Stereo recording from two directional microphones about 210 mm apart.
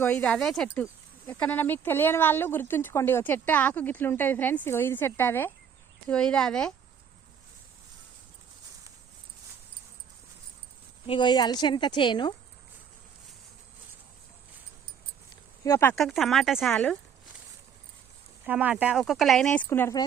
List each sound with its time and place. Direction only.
0.0 s speech: 5° left (ahead or behind)
11.0 s a woman's voice: 25° left (ahead or behind)
15.6 s speech: 15° left (ahead or behind)
16.0 s speech: centre (ahead or behind)
18.4 s speech: 5° right (ahead or behind); by 20.1 s 15° left (ahead or behind)